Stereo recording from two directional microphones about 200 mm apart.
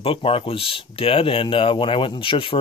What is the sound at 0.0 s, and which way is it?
Speech, 30° left (ahead or behind).